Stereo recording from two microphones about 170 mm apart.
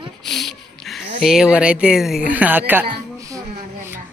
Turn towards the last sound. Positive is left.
turn(degrees=-15)  # may be behind; listen again after turning